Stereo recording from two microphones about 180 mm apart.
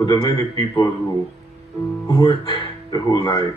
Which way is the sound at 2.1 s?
25° left (ahead or behind).